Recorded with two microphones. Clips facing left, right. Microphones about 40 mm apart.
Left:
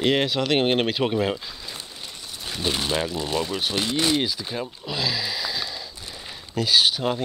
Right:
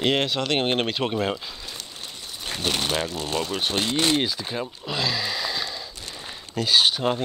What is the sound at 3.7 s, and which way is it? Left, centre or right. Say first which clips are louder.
Speech: even; right.